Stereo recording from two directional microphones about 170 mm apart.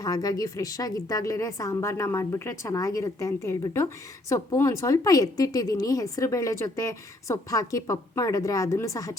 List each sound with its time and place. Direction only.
0.0 s a woman's voice: 20° left (ahead or behind)